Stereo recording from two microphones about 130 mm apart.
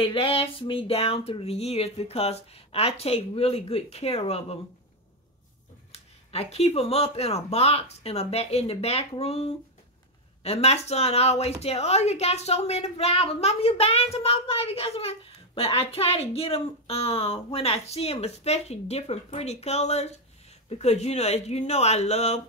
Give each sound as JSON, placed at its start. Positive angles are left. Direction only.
{"t": 0.0, "sound": "a woman's voice", "side_deg": 45}
{"t": 5.9, "sound": "a woman's voice", "side_deg": 50}